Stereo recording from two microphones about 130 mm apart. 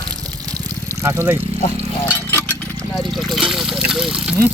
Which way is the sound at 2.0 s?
15° left (ahead or behind).